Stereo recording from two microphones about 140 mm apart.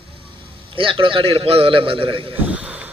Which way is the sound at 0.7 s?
40° right (ahead or behind).